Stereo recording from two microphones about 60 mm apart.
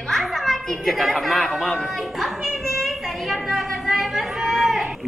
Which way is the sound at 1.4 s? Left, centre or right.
Centre.